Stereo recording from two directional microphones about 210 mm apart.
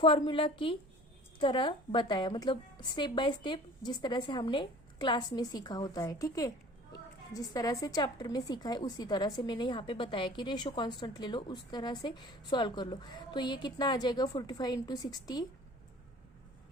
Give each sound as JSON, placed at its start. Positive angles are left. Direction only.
{"t": 0.0, "sound": "a woman's voice", "side_deg": 25}